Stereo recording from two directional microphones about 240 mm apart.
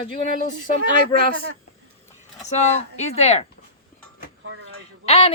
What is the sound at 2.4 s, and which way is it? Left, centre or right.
A woman's voice, left.